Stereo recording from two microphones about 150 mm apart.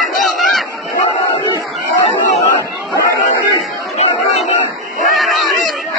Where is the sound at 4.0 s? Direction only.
45° left (ahead or behind).